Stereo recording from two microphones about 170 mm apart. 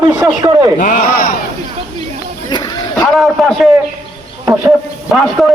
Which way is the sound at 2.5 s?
25° left (ahead or behind).